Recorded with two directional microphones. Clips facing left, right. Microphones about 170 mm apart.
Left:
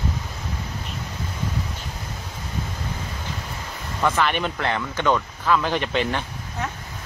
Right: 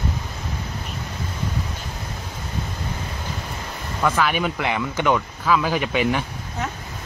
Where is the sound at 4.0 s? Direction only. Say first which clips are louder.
Right 1 dB; centre (ahead or behind).